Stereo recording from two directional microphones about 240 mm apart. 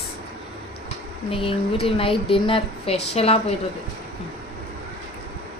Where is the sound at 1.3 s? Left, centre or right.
Left.